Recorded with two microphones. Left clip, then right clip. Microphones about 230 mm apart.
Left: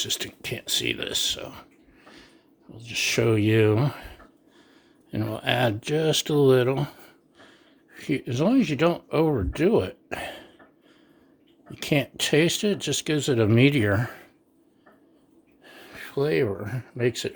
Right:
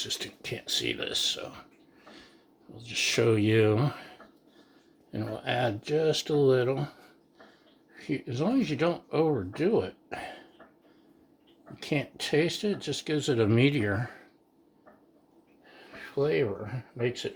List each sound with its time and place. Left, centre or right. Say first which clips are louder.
0.0 s speech: left 5 dB; left
2.0 s a sound: left 2 dB; left
2.7 s speech: left 3 dB; left
5.1 s speech: left 5 dB; left
11.7 s speech: left 7 dB; left
15.6 s speech: left 4 dB; left